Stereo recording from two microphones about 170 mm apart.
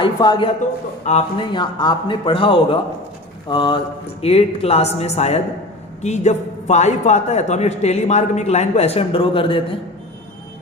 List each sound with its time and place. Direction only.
0.0 s a man's voice: 25° left (ahead or behind)